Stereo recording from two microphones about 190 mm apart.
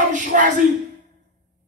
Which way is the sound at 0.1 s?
40° right (ahead or behind).